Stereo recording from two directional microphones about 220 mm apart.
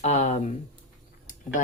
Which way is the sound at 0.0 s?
30° left (ahead or behind).